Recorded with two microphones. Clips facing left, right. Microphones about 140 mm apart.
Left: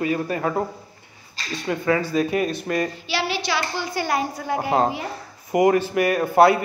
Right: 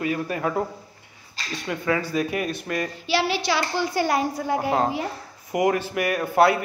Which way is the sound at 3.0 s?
40° right (ahead or behind).